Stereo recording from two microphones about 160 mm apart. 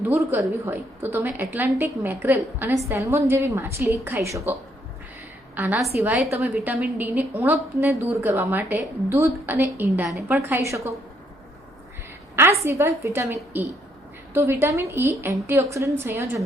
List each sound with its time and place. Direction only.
0.0 s a woman's voice: 15° right (ahead or behind)
5.5 s a woman's voice: 10° right (ahead or behind)
12.4 s a woman's voice: 15° right (ahead or behind)